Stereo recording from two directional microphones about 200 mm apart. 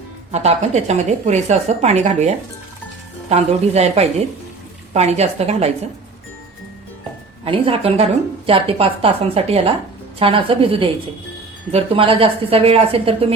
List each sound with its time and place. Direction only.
0.3 s a woman's voice: 35° right (ahead or behind)
7.4 s a woman's voice: 25° right (ahead or behind)